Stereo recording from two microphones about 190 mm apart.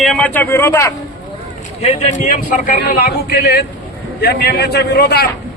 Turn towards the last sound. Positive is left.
turn(degrees=55)  # may be behind; listen again after turning